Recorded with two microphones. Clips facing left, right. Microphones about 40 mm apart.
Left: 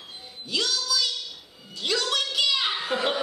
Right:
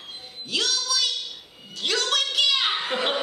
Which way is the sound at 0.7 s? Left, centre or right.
Right.